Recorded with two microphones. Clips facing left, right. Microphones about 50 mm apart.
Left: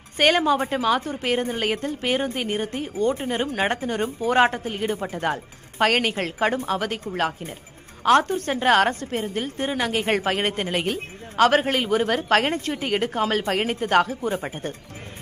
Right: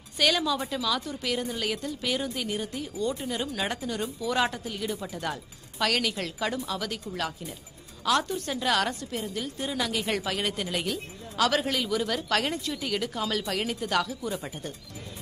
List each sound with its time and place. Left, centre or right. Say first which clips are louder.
0.2 s a woman's voice: left 7 dB; left